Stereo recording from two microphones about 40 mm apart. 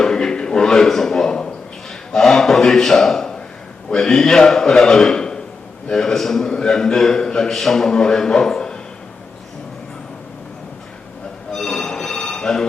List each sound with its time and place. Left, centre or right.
0.0 s a sound: centre
3.8 s a man's voice: centre
11.5 s telephone bell ringing: centre